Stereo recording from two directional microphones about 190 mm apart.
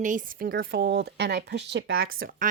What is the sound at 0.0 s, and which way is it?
Speech, 45° right (ahead or behind).